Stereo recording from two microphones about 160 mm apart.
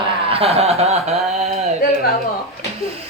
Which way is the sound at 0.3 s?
35° right (ahead or behind).